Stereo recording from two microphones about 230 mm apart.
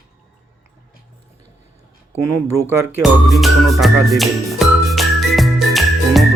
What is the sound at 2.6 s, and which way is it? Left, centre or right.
Speech, centre.